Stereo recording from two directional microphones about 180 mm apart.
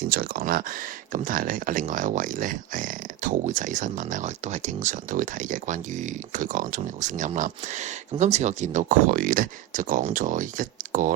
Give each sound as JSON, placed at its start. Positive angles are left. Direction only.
{"t": 0.1, "sound": "speech", "side_deg": -55}